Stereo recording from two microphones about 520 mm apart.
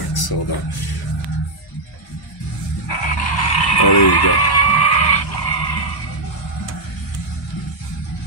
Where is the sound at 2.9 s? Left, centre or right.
Left.